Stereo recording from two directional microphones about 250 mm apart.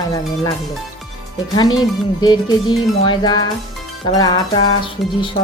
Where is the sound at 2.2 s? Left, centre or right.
Centre.